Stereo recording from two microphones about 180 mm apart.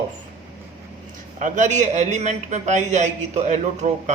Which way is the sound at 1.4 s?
45° right (ahead or behind).